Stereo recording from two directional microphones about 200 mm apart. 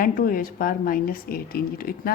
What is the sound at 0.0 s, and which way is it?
A woman's voice, 45° left (ahead or behind).